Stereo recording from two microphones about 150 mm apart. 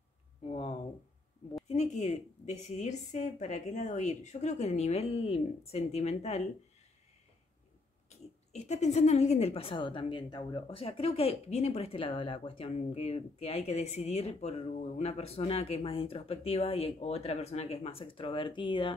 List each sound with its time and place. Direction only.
0.5 s speech: 35° left (ahead or behind)
1.7 s a woman's voice: 50° left (ahead or behind)
8.1 s speech: 50° left (ahead or behind)